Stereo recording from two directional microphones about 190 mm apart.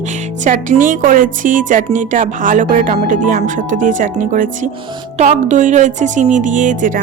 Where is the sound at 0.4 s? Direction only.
45° right (ahead or behind).